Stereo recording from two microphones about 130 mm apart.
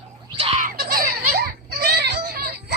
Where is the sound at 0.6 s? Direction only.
90° right.